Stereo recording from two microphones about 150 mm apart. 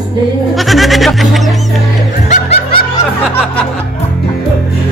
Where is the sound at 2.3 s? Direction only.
45° left (ahead or behind).